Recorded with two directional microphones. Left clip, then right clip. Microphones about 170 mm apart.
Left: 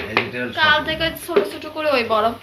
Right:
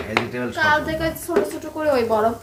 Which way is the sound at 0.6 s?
45° right (ahead or behind).